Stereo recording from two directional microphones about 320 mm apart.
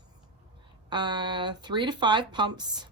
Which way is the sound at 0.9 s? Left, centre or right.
Centre.